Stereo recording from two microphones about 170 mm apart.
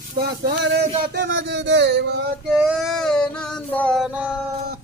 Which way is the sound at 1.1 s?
90° right.